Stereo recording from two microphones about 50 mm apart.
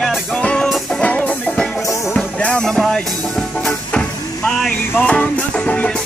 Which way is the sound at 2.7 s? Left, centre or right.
Centre.